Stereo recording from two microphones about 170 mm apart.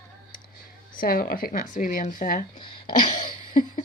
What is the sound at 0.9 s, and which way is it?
Speech, 60° left (ahead or behind).